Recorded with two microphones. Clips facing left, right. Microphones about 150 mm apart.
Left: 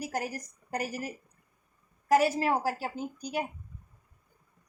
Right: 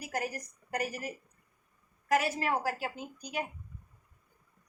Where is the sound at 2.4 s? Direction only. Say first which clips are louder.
Left 3 dB; 35° left (ahead or behind).